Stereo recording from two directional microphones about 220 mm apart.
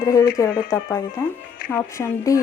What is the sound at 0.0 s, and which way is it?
Speech, 15° left (ahead or behind).